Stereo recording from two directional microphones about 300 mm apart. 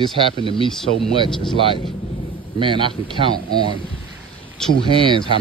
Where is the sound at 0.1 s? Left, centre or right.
Centre.